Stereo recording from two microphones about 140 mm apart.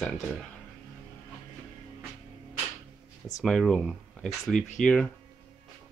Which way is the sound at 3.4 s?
5° left (ahead or behind).